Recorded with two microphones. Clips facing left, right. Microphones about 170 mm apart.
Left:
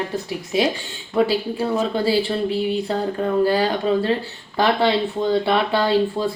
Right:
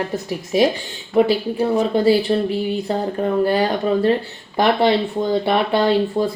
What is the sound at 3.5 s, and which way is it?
Speech, 15° right (ahead or behind).